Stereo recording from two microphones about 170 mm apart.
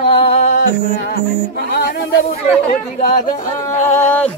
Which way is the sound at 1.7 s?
70° left (ahead or behind).